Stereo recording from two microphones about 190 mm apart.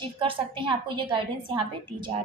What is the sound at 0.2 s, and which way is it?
A woman's voice, 25° right (ahead or behind).